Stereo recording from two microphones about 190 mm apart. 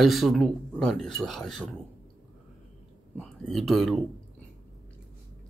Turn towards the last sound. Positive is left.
turn(degrees=0)  # may be behind; listen again after turning